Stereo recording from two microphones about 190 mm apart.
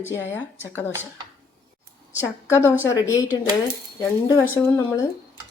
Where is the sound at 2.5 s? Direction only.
15° left (ahead or behind).